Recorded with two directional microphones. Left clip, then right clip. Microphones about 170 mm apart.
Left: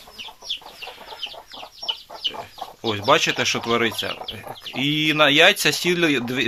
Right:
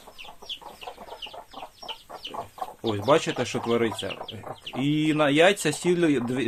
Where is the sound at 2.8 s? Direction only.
Centre (ahead or behind).